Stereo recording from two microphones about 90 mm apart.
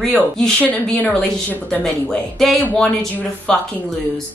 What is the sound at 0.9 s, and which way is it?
Speech, 15° left (ahead or behind).